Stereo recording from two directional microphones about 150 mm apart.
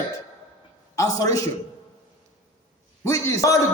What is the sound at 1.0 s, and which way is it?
Speech, 20° left (ahead or behind).